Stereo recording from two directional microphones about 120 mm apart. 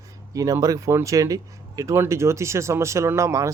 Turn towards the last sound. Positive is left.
turn(degrees=-25)  # may be behind; listen again after turning